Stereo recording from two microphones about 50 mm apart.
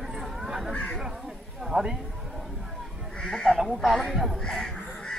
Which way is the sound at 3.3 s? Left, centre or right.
Centre.